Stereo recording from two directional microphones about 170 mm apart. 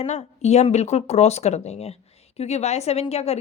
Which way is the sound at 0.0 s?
40° left (ahead or behind).